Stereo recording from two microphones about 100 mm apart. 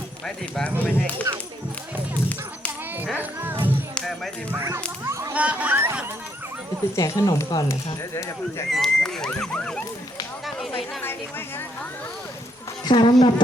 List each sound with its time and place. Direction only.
0.3 s speech: 10° left (ahead or behind)
3.2 s music: 20° right (ahead or behind)
3.9 s music: 5° left (ahead or behind)
4.6 s a sound: 30° right (ahead or behind)
5.3 s a sound: 15° right (ahead or behind)
6.9 s speech: 30° left (ahead or behind)
8.7 s speech: 5° left (ahead or behind)
11.0 s a sound: 20° left (ahead or behind)
12.8 s a woman's voice: 50° left (ahead or behind)